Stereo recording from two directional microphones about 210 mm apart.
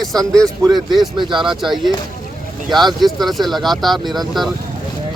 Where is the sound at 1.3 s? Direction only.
Centre (ahead or behind).